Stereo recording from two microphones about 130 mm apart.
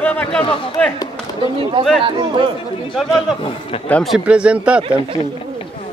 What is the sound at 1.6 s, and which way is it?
Speech, 45° right (ahead or behind).